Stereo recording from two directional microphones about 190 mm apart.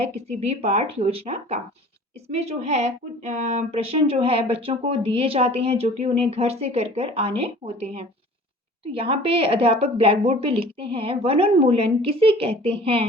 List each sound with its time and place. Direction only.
0.0 s a woman's voice: 35° right (ahead or behind)